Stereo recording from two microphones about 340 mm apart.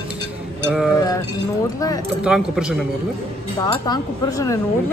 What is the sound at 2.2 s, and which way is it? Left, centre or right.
Speech, centre.